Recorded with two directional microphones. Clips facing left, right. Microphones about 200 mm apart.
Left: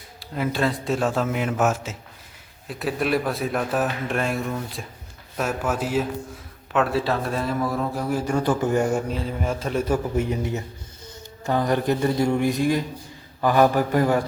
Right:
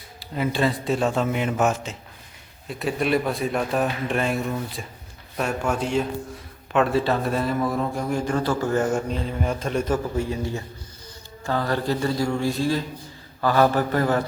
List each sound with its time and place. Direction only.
0.2 s a man's voice: centre (ahead or behind)
10.2 s a man's voice: 20° left (ahead or behind)